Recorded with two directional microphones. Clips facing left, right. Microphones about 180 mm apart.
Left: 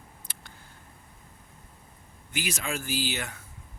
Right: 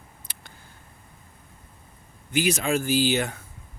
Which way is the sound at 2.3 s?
25° right (ahead or behind).